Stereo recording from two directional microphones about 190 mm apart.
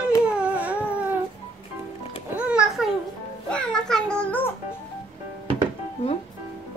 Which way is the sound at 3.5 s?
5° left (ahead or behind).